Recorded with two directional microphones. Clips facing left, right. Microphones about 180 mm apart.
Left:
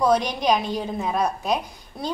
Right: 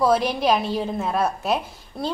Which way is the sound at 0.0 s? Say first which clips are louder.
Right 1 dB; 5° right (ahead or behind).